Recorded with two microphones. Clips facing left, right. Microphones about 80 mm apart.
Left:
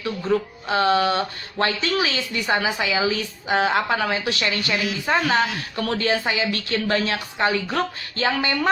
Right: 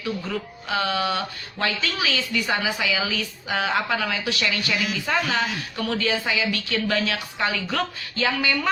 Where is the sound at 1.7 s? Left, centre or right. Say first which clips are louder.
Left 3 dB; left.